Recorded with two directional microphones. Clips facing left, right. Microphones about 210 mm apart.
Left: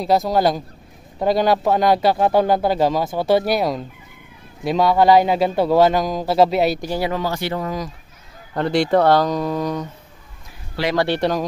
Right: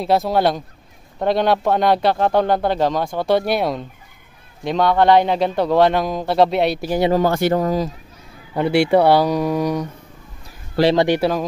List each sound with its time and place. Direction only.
0.0 s speech: centre (ahead or behind)
7.2 s speech: 50° right (ahead or behind)
8.5 s speech: 10° right (ahead or behind)
10.8 s speech: 30° right (ahead or behind)
11.1 s speech: 5° right (ahead or behind)